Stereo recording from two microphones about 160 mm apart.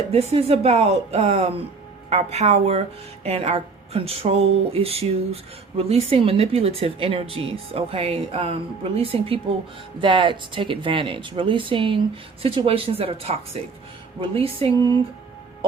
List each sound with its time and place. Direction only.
0.1 s speech: 40° right (ahead or behind)